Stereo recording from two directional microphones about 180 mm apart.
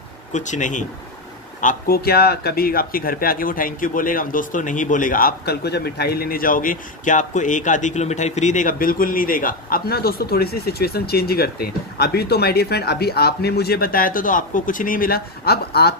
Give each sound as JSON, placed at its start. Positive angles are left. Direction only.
{"t": 0.3, "sound": "speech", "side_deg": 45}